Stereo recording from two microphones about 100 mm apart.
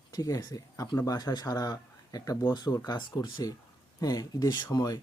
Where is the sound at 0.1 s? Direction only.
40° left (ahead or behind).